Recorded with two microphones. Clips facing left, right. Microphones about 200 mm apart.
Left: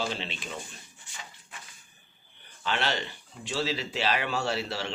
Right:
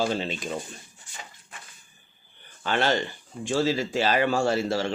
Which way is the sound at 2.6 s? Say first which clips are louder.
Right 6 dB; 45° right (ahead or behind).